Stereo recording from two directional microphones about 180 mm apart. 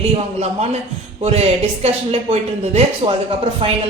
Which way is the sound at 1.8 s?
35° right (ahead or behind).